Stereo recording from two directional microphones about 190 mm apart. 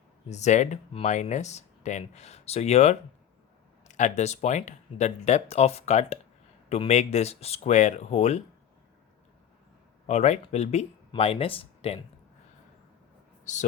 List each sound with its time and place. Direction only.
0.3 s speech: 35° left (ahead or behind)
10.1 s speech: 35° left (ahead or behind)
13.4 s speech: 40° left (ahead or behind)